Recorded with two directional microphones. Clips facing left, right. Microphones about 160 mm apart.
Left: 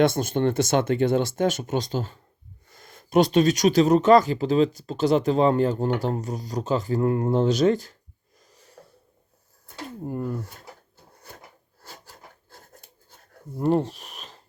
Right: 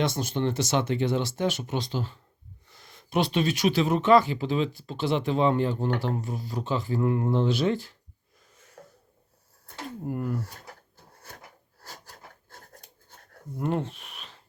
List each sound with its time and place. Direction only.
0.0 s speech: 50° left (ahead or behind)
8.5 s a sound: 35° left (ahead or behind)
10.1 s speech: 15° left (ahead or behind)
13.6 s speech: 35° left (ahead or behind)